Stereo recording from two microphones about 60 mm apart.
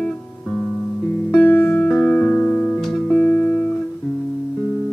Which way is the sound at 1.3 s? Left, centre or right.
Left.